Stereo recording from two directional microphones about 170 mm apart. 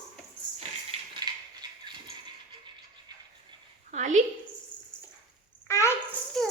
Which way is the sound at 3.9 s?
45° right (ahead or behind).